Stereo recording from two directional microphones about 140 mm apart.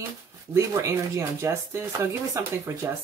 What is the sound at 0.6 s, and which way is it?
Speech, 20° right (ahead or behind).